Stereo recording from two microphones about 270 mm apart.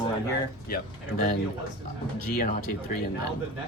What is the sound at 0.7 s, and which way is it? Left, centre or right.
Speech, left.